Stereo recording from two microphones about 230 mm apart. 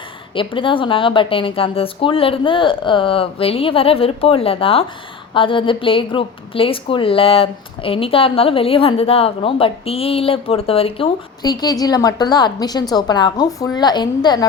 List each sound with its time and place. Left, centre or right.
0.3 s a woman's voice: left